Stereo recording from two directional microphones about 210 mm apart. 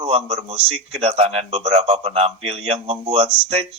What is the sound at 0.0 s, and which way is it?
A man's voice, 30° right (ahead or behind).